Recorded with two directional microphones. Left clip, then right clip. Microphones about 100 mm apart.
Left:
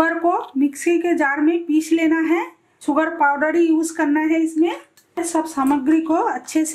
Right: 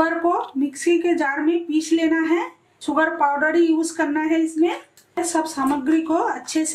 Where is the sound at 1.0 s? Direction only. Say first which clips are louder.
Left 2 dB; 35° left (ahead or behind).